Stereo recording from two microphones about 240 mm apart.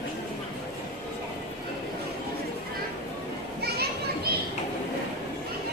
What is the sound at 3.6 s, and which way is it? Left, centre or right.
Children playing, right.